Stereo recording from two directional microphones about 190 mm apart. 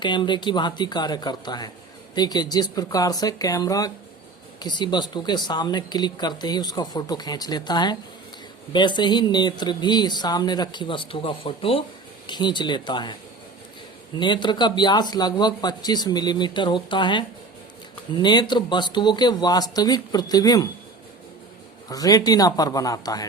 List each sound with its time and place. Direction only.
0.0 s speech: 25° left (ahead or behind)
14.2 s speech: 25° left (ahead or behind)
21.8 s speech: 20° left (ahead or behind)